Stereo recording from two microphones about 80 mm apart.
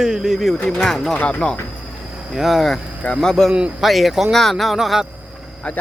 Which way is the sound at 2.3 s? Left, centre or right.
Centre.